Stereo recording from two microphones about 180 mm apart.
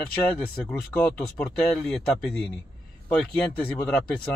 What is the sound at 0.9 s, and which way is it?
Speech, 10° left (ahead or behind).